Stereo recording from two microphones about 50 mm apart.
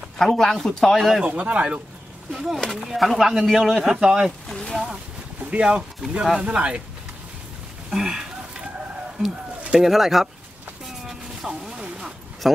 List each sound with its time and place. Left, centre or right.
0.2 s speech: centre
1.2 s speech: right
2.3 s a man's voice: centre
4.5 s speech: centre
5.5 s speech: right
7.9 s a sound: centre
9.8 s speech: centre
11.1 s a sound: centre
12.4 s speech: centre